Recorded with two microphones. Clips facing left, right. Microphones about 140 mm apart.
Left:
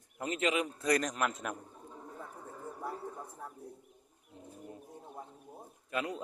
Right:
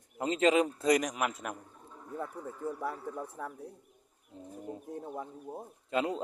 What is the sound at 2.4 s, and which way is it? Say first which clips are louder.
Speech: right 5 dB; 75° right (ahead or behind).